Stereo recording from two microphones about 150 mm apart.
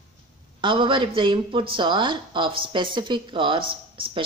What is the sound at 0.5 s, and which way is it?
A woman's voice, 35° right (ahead or behind).